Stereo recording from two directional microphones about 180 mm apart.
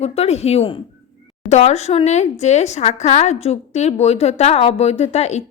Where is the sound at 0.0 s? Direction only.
35° left (ahead or behind).